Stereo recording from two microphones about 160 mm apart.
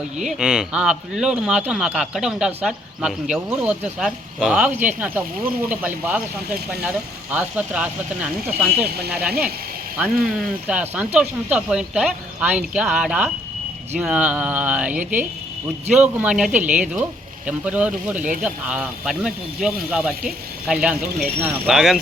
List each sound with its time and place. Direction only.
0.2 s speech: 5° right (ahead or behind)
9.0 s speech: 85° right
10.0 s speech: 5° right (ahead or behind)